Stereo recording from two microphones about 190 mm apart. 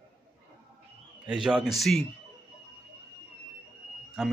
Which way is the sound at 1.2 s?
5° right (ahead or behind).